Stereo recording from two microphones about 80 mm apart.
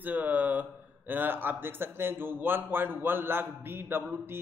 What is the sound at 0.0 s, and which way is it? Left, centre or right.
Speech, right.